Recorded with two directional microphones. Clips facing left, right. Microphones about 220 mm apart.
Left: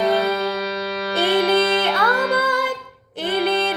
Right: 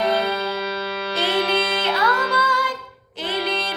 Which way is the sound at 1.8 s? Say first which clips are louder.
Left 2 dB; 60° left (ahead or behind).